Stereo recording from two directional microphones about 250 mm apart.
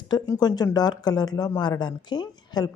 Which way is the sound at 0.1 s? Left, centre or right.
Centre.